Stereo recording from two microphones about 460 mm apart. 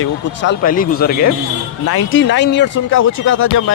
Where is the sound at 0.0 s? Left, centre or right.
Left.